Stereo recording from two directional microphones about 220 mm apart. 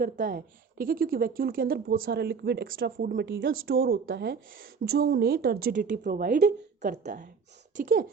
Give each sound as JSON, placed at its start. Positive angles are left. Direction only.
{"t": 0.0, "sound": "a woman's voice", "side_deg": -40}
{"t": 6.9, "sound": "a woman's voice", "side_deg": -35}